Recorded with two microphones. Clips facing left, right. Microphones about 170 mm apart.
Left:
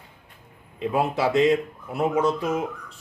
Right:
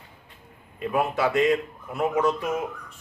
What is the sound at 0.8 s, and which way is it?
A man's voice, 25° left (ahead or behind).